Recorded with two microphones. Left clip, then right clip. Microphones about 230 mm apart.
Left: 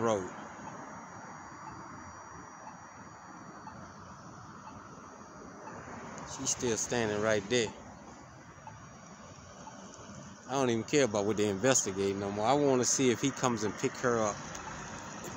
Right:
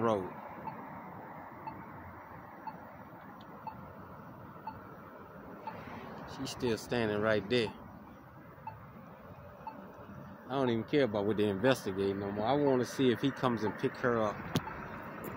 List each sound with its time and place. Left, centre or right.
6.2 s speech: centre
10.5 s speech: centre
14.3 s vehicle: left